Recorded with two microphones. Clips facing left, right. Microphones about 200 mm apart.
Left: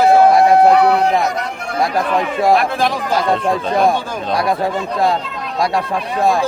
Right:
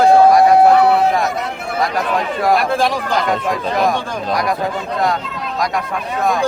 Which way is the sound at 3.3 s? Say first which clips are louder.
Left 2 dB; 30° left (ahead or behind).